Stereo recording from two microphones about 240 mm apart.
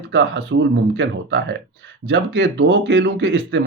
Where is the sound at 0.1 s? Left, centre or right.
Right.